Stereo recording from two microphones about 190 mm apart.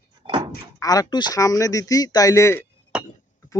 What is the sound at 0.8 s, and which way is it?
Speech, 20° left (ahead or behind).